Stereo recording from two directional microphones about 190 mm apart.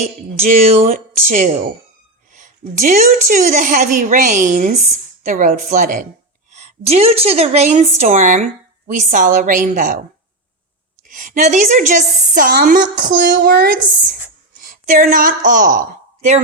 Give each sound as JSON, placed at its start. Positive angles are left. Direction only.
{"t": 0.0, "sound": "a woman's voice", "side_deg": -35}
{"t": 11.1, "sound": "a woman's voice", "side_deg": -45}